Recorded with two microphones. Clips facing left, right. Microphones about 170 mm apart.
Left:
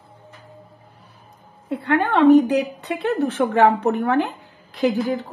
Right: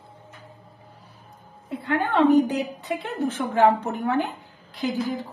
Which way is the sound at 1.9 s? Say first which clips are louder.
Left 5 dB; 65° left (ahead or behind).